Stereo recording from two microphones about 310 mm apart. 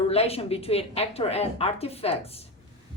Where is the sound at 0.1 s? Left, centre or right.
Centre.